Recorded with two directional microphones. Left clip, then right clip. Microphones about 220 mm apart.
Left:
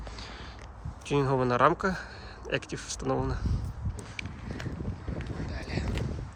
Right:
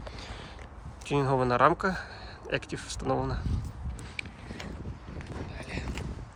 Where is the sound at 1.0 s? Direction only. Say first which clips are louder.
Even; 5° left (ahead or behind).